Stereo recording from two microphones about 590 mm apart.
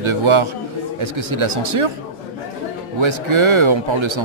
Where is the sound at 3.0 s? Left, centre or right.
Right.